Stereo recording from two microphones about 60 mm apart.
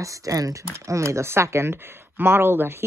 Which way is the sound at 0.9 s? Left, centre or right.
Right.